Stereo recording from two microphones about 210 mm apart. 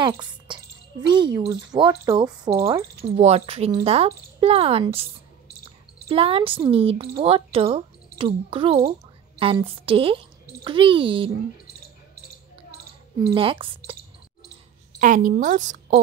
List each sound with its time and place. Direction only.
0.0 s a woman's voice: 20° right (ahead or behind)
3.1 s a woman's voice: 30° right (ahead or behind)
6.0 s a woman's voice: 25° right (ahead or behind)
13.3 s a woman's voice: 25° right (ahead or behind)
15.0 s a woman's voice: 40° right (ahead or behind)